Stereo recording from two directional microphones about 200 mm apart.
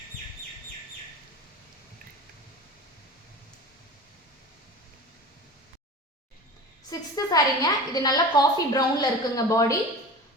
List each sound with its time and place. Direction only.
6.9 s a woman's voice: 20° left (ahead or behind)